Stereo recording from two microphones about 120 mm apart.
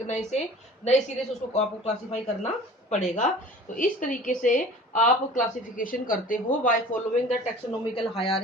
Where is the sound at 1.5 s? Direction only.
65° left (ahead or behind).